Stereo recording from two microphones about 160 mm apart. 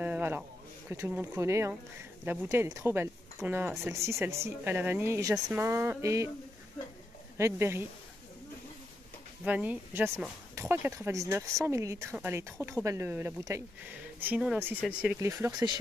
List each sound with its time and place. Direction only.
0.0 s a sound: 10° right (ahead or behind)
0.8 s speech: 15° right (ahead or behind)
7.3 s speech: 15° right (ahead or behind)
9.4 s speech: 10° right (ahead or behind)
15.1 s speech: 20° right (ahead or behind)